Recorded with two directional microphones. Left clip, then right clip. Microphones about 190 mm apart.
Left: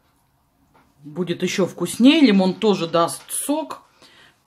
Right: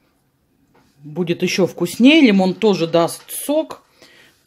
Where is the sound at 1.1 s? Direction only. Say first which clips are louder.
Right 4 dB; 20° right (ahead or behind).